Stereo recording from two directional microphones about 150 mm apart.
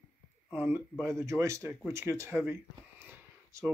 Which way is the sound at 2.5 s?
15° right (ahead or behind).